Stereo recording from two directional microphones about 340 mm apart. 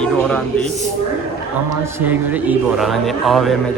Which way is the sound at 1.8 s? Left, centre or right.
Centre.